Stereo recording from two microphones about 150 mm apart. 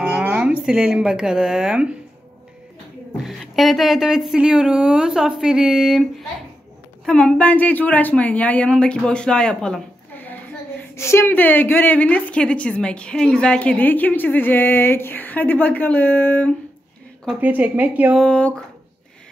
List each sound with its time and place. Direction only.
0.0 s speech: 10° right (ahead or behind)
3.3 s a woman's voice: centre (ahead or behind)
17.4 s speech: 10° right (ahead or behind)
18.1 s speech: 5° left (ahead or behind)